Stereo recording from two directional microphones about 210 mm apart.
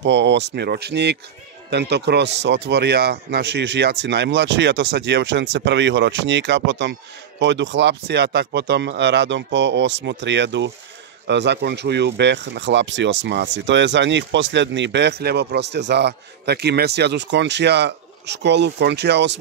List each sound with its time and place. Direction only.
0.0 s a man's voice: 55° right (ahead or behind)